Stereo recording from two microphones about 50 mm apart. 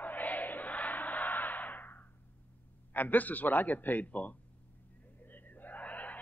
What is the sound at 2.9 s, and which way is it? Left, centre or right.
A man's voice, left.